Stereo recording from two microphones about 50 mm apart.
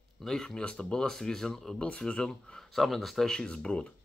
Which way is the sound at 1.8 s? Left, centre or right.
Centre.